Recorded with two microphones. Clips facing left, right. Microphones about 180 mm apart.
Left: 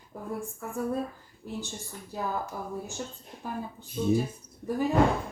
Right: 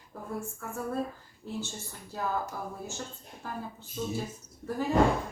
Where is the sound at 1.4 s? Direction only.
15° left (ahead or behind).